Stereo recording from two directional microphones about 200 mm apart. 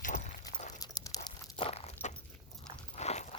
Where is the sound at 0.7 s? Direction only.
15° left (ahead or behind).